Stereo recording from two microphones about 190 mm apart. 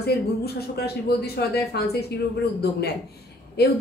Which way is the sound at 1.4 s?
55° left (ahead or behind).